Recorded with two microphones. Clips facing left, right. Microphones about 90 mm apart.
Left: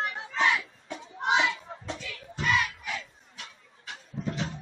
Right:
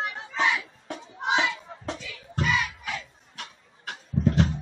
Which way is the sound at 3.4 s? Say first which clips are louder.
Right 4 dB; 60° right (ahead or behind).